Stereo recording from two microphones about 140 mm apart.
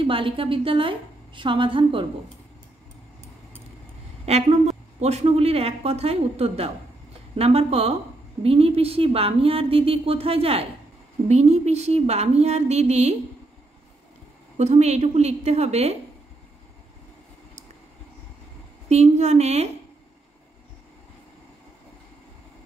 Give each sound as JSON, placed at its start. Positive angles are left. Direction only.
{"t": 0.0, "sound": "a woman's voice", "side_deg": -40}
{"t": 4.3, "sound": "speech", "side_deg": -50}
{"t": 14.6, "sound": "speech", "side_deg": -55}
{"t": 18.9, "sound": "speech", "side_deg": -55}